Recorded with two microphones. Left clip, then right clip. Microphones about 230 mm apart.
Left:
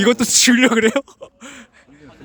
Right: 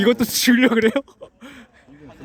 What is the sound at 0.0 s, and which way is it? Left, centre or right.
A man's voice, centre.